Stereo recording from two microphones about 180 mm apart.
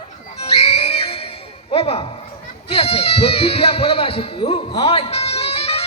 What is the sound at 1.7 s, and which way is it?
Speech, 35° left (ahead or behind).